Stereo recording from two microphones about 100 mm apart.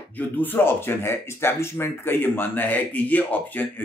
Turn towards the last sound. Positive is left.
turn(degrees=15)  # may be behind; listen again after turning